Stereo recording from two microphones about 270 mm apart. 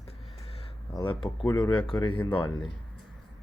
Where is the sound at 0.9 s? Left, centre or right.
Centre.